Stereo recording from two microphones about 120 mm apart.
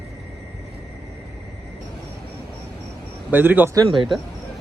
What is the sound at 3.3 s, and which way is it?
Speech, 15° right (ahead or behind).